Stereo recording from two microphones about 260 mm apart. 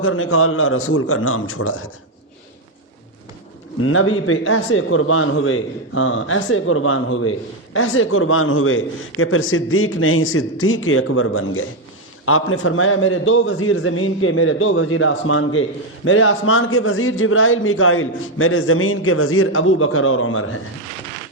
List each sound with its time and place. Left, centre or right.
0.0 s a man's voice: left
3.8 s a man's voice: left